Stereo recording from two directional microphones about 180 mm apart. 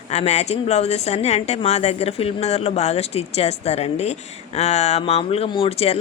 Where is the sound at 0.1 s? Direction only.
35° left (ahead or behind).